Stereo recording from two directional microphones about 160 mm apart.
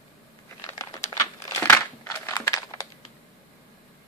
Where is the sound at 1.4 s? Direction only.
15° left (ahead or behind).